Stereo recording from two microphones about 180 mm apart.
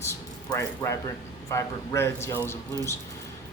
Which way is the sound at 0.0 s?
15° left (ahead or behind).